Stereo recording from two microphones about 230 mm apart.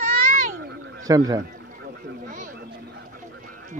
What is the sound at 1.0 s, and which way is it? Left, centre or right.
Speech, centre.